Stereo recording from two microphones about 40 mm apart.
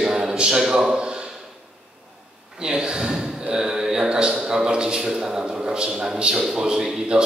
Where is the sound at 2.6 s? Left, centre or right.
Centre.